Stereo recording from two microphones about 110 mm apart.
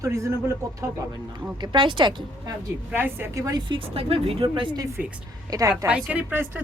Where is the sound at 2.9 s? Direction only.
20° right (ahead or behind).